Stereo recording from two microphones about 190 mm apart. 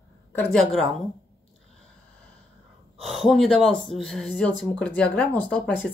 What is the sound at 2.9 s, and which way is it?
Speech, centre (ahead or behind).